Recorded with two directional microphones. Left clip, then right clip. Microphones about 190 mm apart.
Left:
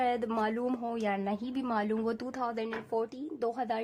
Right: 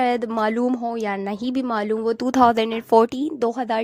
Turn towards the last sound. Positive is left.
turn(degrees=-45)  # may be behind; listen again after turning